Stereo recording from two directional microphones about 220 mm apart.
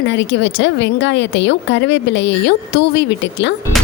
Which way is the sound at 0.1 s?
55° left (ahead or behind).